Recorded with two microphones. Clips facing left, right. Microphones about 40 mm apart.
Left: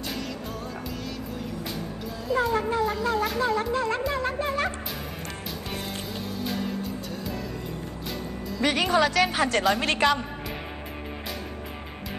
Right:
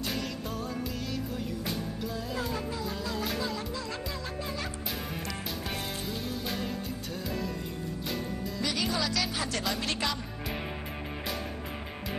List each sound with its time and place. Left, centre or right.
2.3 s music: centre
2.7 s shofar: left
3.3 s a woman's voice: left
4.1 s music: left
6.0 s music: centre
8.5 s a woman's voice: left